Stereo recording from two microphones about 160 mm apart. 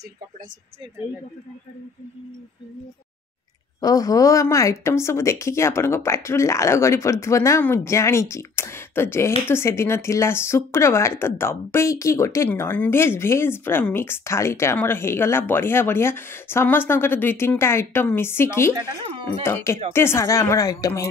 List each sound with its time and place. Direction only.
3.8 s a woman's voice: 20° left (ahead or behind)